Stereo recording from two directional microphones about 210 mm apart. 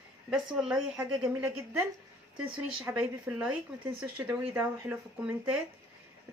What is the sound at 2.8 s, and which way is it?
Speech, 10° right (ahead or behind).